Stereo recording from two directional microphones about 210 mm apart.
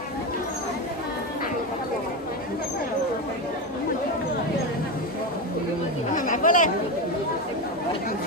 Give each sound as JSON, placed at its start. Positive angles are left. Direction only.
{"t": 6.1, "sound": "chatter", "side_deg": 40}